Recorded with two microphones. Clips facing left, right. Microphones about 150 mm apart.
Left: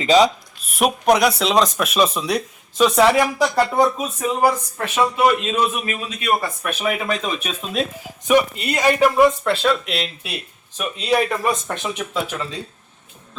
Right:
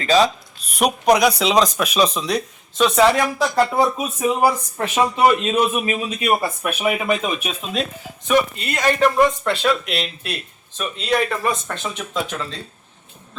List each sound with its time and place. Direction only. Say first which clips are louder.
0.0 s speech: left 2 dB; 20° left (ahead or behind)
0.7 s speech: even; centre (ahead or behind)
3.5 s speech: even; 5° right (ahead or behind); by 6.7 s 20° right (ahead or behind)
6.7 s speech: right 2 dB; 10° right (ahead or behind)
8.3 s speech: left 2 dB; 15° left (ahead or behind)